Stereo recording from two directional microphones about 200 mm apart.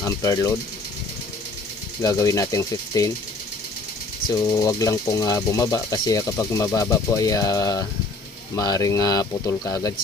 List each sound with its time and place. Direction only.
0.0 s speech: 15° left (ahead or behind)
2.0 s speech: 15° left (ahead or behind)
4.3 s speech: 20° left (ahead or behind)